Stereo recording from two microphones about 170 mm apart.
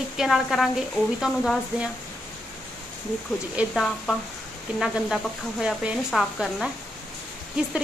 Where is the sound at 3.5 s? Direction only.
5° right (ahead or behind).